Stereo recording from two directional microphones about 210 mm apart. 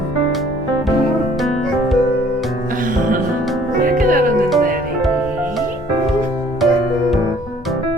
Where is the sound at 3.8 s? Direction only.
40° right (ahead or behind).